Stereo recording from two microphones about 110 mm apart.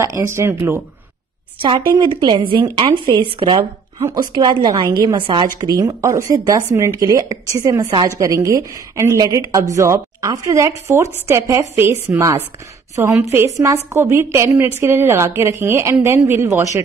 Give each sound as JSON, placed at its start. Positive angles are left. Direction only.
{"t": 0.0, "sound": "speech", "side_deg": -25}
{"t": 1.9, "sound": "a woman's voice", "side_deg": -40}
{"t": 4.0, "sound": "a woman's voice", "side_deg": -35}
{"t": 5.6, "sound": "speech", "side_deg": -30}